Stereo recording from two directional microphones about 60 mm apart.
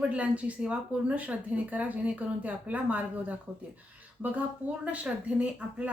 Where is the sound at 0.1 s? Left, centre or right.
Right.